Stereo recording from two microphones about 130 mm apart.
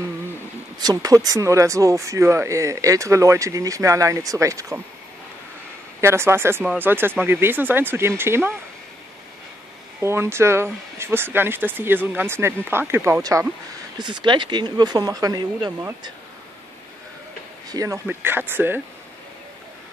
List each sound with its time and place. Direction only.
0.7 s speech: 30° right (ahead or behind)
5.9 s speech: 20° right (ahead or behind)
9.9 s speech: 20° right (ahead or behind)
13.9 s speech: 35° right (ahead or behind)
17.6 s speech: 25° right (ahead or behind)
18.0 s speech: 15° right (ahead or behind)